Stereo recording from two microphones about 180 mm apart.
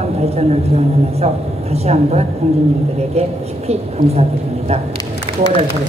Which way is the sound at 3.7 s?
35° right (ahead or behind).